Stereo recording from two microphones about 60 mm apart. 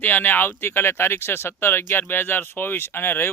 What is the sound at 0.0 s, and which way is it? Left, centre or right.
Speech, left.